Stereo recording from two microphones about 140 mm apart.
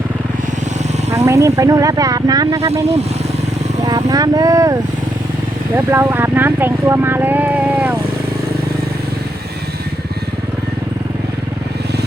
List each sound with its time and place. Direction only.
1.1 s speech: 20° right (ahead or behind)
3.8 s speech: 25° right (ahead or behind); by 7.9 s 10° right (ahead or behind)